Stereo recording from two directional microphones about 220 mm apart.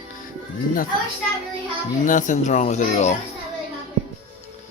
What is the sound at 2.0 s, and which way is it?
Speech, 35° left (ahead or behind).